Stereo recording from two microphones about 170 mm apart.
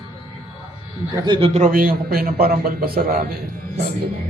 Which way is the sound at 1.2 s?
30° right (ahead or behind).